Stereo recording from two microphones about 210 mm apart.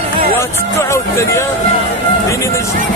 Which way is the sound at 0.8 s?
15° left (ahead or behind).